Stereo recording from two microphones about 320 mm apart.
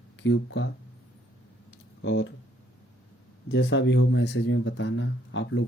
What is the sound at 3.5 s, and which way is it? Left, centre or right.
Speech, left.